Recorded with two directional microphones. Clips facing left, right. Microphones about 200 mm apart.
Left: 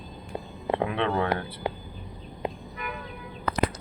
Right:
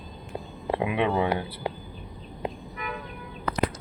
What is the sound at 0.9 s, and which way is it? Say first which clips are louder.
Speech: right 5 dB; 15° right (ahead or behind).